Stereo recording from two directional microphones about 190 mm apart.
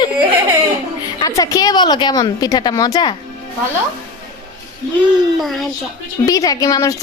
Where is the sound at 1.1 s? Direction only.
20° left (ahead or behind).